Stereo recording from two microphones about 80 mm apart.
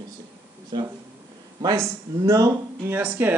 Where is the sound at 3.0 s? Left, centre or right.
Centre.